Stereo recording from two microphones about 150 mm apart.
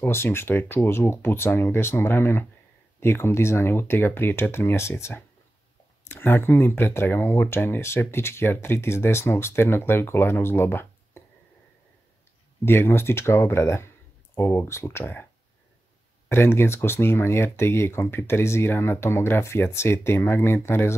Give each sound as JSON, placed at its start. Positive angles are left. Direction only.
{"t": 0.0, "sound": "speech", "side_deg": 15}
{"t": 12.6, "sound": "speech", "side_deg": 15}
{"t": 16.3, "sound": "speech", "side_deg": 15}